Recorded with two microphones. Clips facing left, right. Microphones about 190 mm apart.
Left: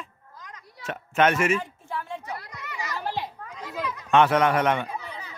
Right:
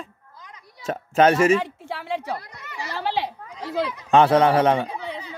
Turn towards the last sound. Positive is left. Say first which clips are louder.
# right 4 dB
turn(degrees=-35)  # may be behind; listen again after turning